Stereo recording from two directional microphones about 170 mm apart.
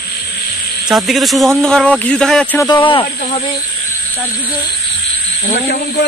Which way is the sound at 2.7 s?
30° left (ahead or behind).